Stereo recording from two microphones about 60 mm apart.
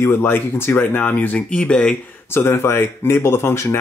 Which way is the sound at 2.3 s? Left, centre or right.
Left.